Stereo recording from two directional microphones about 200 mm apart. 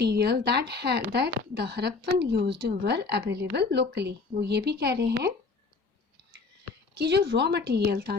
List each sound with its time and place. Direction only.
0.0 s a woman's voice: 55° right (ahead or behind)
6.9 s a woman's voice: 55° right (ahead or behind)